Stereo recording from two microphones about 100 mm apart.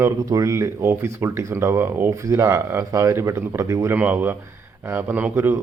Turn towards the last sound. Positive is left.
turn(degrees=-20)  # may be behind; listen again after turning